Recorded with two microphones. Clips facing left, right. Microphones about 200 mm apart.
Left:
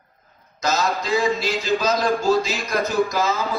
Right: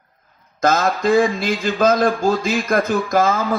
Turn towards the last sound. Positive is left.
turn(degrees=-55)  # may be behind; listen again after turning